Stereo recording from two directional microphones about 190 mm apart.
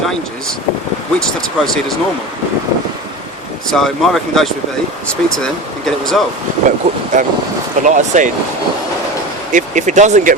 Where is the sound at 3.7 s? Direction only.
Centre (ahead or behind).